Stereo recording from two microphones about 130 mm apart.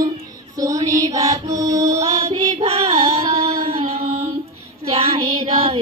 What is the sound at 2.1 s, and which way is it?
Music, 50° right (ahead or behind).